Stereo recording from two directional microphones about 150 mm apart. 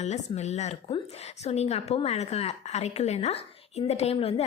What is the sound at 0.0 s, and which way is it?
A woman's voice, 50° left (ahead or behind).